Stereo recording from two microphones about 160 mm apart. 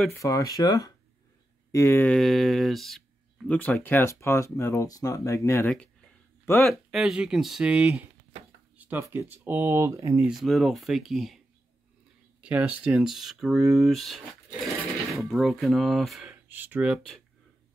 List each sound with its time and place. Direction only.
0.2 s speech: 20° left (ahead or behind)
2.0 s speech: centre (ahead or behind)
6.6 s speech: centre (ahead or behind); by 10.2 s 20° right (ahead or behind)
10.2 s speech: centre (ahead or behind)